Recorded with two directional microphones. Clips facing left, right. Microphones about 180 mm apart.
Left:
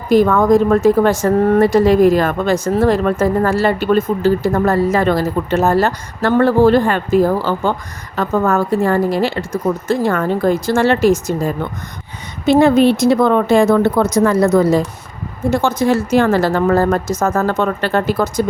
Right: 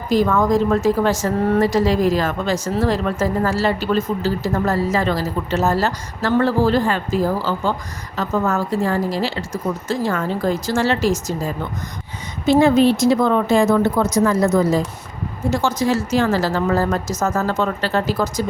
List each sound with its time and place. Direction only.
0.1 s a woman's voice: 55° left (ahead or behind)